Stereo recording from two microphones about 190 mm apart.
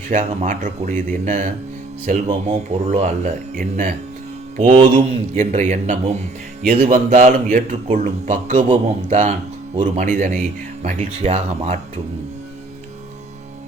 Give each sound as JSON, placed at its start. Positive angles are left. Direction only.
{"t": 0.1, "sound": "speech", "side_deg": -40}
{"t": 2.5, "sound": "speech", "side_deg": -35}
{"t": 4.5, "sound": "speech", "side_deg": -30}